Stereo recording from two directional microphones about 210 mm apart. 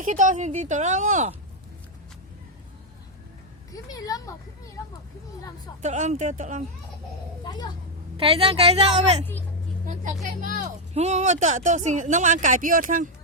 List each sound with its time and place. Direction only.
0.0 s speech: 35° right (ahead or behind)
3.7 s speech: 15° left (ahead or behind)
5.8 s speech: 35° right (ahead or behind)
7.4 s speech: 20° left (ahead or behind)
8.1 s a woman's voice: 25° right (ahead or behind)
10.2 s speech: 40° right (ahead or behind)